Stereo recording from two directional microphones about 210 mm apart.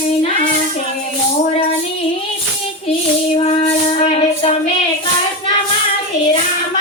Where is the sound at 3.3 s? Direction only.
25° left (ahead or behind).